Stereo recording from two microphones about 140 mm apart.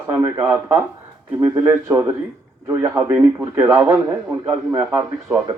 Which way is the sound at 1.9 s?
25° right (ahead or behind).